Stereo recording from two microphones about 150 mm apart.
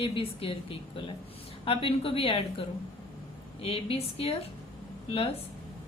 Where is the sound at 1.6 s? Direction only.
40° left (ahead or behind).